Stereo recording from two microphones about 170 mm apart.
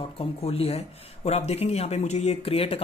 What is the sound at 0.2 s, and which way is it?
Speech, 35° left (ahead or behind).